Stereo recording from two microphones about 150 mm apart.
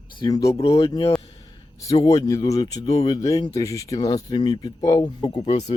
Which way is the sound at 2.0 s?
25° left (ahead or behind).